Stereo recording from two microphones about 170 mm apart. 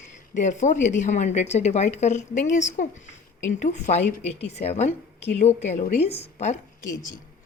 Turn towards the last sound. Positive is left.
turn(degrees=45)  # may be behind; listen again after turning